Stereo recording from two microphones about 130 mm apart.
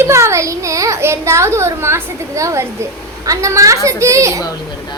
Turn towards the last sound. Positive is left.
turn(degrees=-25)  # may be behind; listen again after turning